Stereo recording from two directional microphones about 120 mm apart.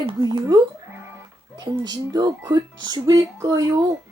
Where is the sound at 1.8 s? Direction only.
35° right (ahead or behind).